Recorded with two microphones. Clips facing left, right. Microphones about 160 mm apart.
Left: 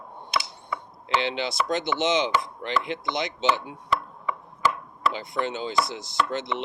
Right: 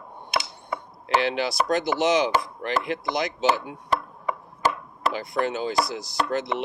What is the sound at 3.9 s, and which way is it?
Chopping, 40° right (ahead or behind).